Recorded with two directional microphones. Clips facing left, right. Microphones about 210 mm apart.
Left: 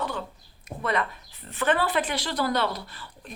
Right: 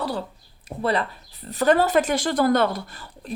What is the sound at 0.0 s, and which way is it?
Speech, 35° right (ahead or behind).